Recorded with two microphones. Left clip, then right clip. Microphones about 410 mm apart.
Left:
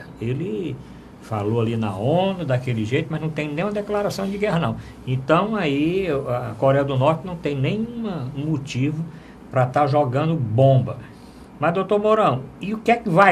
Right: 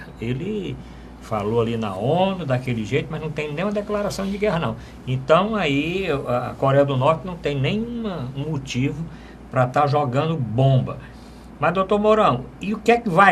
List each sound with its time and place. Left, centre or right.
0.2 s speech: left